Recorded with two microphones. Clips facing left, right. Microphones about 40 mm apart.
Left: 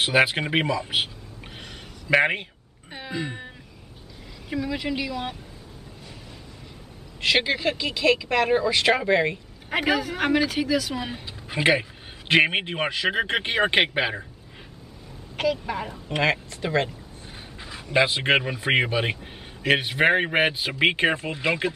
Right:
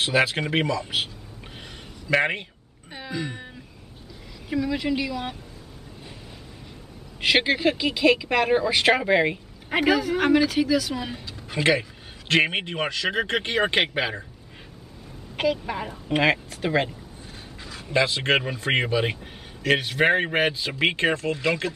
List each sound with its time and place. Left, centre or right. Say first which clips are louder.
0.0 s speech: left 2 dB; centre
4.5 s speech: right 3 dB; centre
7.2 s speech: right 1 dB; centre
9.8 s speech: right 2 dB; centre
11.2 s a sound: left 1 dB; centre
12.3 s speech: left 2 dB; centre
15.3 s speech: even; centre
17.6 s a sound: left 1 dB; centre
17.9 s speech: left 1 dB; centre